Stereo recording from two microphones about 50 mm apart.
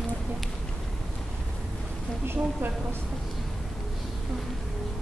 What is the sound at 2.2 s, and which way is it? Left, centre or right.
Speech, right.